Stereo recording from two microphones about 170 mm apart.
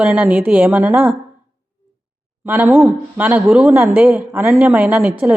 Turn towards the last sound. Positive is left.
turn(degrees=-5)  # may be behind; listen again after turning